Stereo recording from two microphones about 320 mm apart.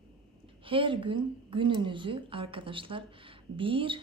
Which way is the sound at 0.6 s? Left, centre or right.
Centre.